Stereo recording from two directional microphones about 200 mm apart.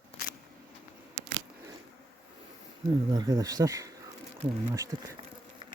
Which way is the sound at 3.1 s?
20° right (ahead or behind).